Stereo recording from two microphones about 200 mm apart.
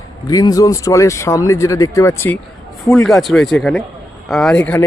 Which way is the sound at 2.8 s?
Centre (ahead or behind).